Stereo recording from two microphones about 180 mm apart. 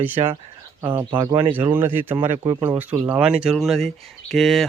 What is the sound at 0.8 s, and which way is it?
Speech, 10° right (ahead or behind).